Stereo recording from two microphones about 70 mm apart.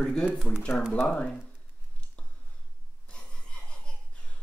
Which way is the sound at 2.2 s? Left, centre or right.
Centre.